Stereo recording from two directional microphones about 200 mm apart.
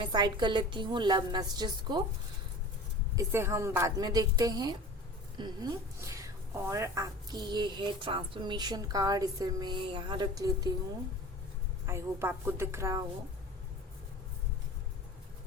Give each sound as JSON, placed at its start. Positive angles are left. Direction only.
{"t": 0.0, "sound": "a woman's voice", "side_deg": -20}
{"t": 3.2, "sound": "a woman's voice", "side_deg": -15}
{"t": 11.9, "sound": "a woman's voice", "side_deg": -10}